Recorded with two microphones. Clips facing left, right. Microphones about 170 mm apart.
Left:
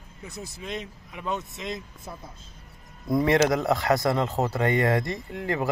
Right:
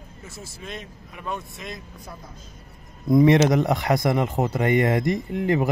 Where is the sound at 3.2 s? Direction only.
20° right (ahead or behind).